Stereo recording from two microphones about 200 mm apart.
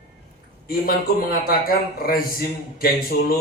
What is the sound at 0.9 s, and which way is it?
A man's voice, 50° left (ahead or behind).